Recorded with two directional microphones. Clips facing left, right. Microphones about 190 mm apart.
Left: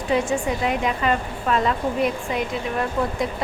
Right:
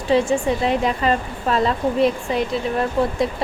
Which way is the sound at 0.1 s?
30° right (ahead or behind).